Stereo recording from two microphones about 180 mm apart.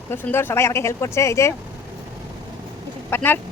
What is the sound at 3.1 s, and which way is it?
Speech, 10° left (ahead or behind).